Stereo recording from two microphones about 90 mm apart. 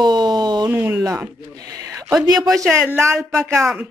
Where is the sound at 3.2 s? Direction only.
Centre (ahead or behind).